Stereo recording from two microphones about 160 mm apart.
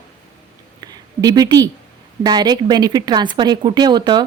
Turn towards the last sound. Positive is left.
turn(degrees=-25)  # may be behind; listen again after turning